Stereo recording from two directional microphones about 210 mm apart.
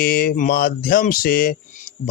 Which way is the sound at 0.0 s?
45° left (ahead or behind).